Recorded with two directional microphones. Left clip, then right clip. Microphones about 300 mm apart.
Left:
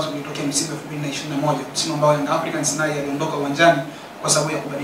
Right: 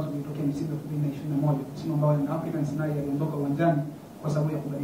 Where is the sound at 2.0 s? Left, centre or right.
Centre.